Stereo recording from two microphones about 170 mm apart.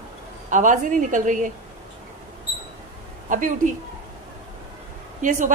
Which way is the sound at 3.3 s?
50° right (ahead or behind).